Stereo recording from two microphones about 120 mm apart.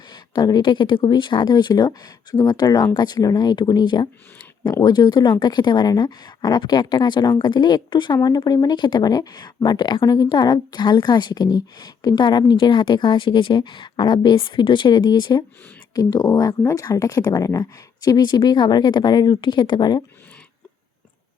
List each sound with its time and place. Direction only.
0.1 s speech: 35° left (ahead or behind)